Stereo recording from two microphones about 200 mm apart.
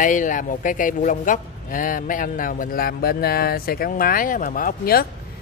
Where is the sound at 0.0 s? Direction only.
40° left (ahead or behind).